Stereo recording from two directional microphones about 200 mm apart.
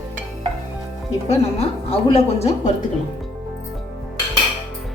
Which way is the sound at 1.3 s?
30° left (ahead or behind).